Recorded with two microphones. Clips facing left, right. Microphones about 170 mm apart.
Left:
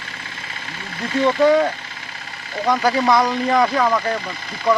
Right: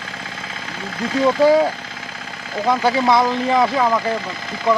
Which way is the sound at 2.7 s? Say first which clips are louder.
Right 1 dB; centre (ahead or behind).